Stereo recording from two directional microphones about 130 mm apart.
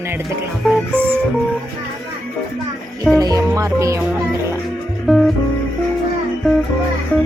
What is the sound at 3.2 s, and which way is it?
Music, 25° right (ahead or behind).